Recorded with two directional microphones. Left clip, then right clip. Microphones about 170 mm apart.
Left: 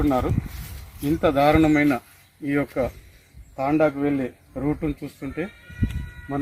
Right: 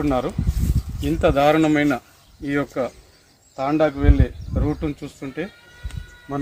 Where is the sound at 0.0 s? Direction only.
15° right (ahead or behind).